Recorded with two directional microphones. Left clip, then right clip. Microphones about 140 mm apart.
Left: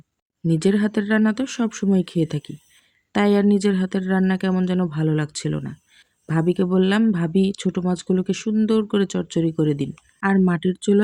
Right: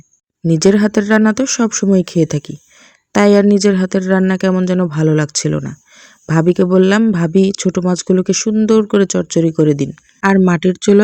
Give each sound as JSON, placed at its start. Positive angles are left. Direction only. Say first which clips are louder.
{"t": 0.4, "sound": "speech", "louder": "right 9 dB", "side_deg": -45}